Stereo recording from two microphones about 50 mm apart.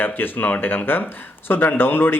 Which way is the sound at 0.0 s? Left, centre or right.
Left.